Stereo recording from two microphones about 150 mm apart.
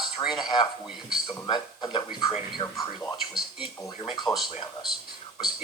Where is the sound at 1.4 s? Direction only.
30° left (ahead or behind).